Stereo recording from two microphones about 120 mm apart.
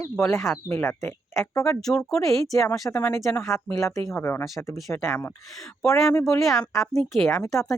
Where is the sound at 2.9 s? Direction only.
20° left (ahead or behind).